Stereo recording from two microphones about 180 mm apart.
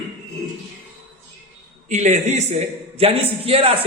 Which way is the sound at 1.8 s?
40° right (ahead or behind).